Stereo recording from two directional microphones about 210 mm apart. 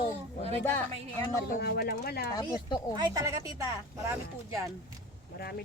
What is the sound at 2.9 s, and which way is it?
Speech, 15° right (ahead or behind).